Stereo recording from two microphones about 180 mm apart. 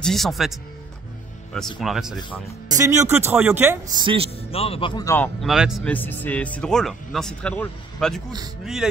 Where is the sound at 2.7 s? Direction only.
20° right (ahead or behind).